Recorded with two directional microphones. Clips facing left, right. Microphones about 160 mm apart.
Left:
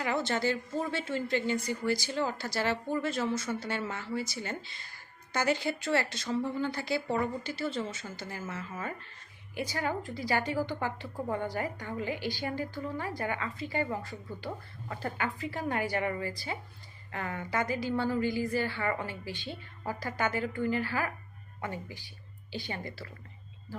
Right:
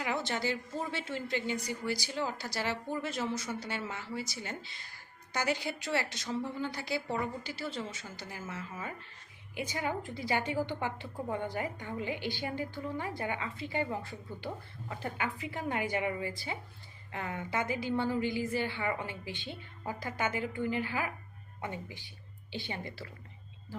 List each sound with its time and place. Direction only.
0.3 s a woman's voice: 15° right (ahead or behind)